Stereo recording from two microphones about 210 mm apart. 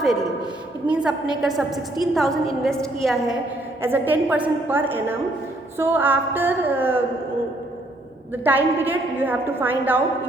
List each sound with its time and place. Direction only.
0.9 s a woman's voice: 5° right (ahead or behind)
3.8 s a woman's voice: 10° right (ahead or behind)
8.4 s a woman's voice: 10° right (ahead or behind)